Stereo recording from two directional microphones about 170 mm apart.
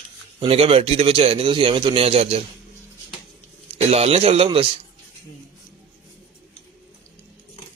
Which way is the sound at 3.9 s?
35° right (ahead or behind).